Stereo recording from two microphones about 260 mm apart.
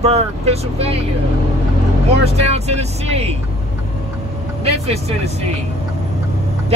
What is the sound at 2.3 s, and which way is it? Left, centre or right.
Speech, right.